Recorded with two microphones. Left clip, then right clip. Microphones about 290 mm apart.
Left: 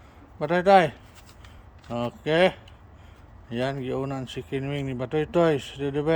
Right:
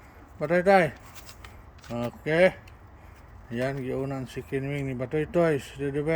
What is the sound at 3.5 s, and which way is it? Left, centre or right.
Speech, centre.